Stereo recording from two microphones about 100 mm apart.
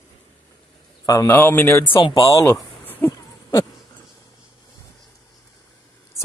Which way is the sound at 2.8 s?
20° left (ahead or behind).